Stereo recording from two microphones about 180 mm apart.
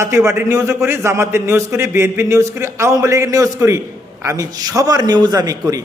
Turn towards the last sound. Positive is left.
turn(degrees=-20)  # may be behind; listen again after turning